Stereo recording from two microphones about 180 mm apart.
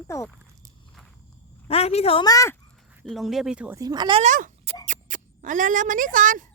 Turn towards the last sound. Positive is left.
turn(degrees=-50)  # may be behind; listen again after turning